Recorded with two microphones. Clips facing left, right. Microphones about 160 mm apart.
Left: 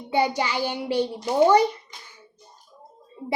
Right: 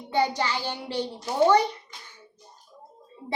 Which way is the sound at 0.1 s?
10° left (ahead or behind).